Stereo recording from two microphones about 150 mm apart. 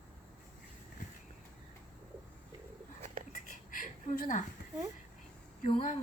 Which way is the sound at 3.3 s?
65° left (ahead or behind).